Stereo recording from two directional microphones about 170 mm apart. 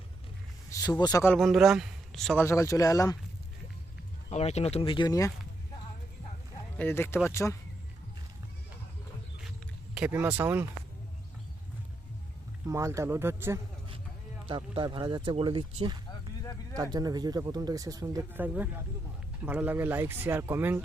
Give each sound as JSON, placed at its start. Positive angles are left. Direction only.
{"t": 0.7, "sound": "speech", "side_deg": 20}
{"t": 1.3, "sound": "a man's voice", "side_deg": 0}
{"t": 2.4, "sound": "speech", "side_deg": 15}
{"t": 4.3, "sound": "speech", "side_deg": 40}
{"t": 6.7, "sound": "speech", "side_deg": 15}
{"t": 9.9, "sound": "speech", "side_deg": -10}
{"t": 12.6, "sound": "speech", "side_deg": -20}
{"t": 14.4, "sound": "speech", "side_deg": -30}